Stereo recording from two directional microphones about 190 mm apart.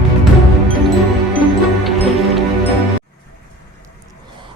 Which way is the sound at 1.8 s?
Centre (ahead or behind).